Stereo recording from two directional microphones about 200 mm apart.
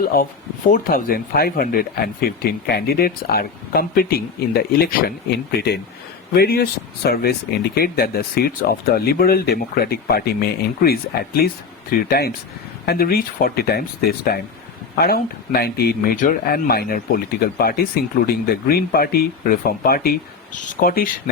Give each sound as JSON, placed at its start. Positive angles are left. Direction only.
{"t": 0.1, "sound": "speech", "side_deg": 50}
{"t": 18.3, "sound": "speech", "side_deg": 50}